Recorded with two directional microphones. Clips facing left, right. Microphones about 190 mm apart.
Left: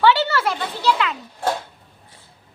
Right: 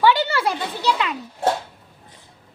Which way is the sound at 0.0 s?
15° right (ahead or behind).